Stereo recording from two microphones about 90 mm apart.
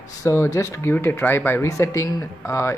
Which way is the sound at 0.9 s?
25° left (ahead or behind).